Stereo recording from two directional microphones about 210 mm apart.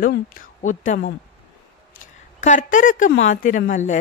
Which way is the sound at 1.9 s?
40° left (ahead or behind).